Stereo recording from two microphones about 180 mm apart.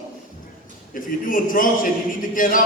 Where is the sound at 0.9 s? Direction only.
50° left (ahead or behind).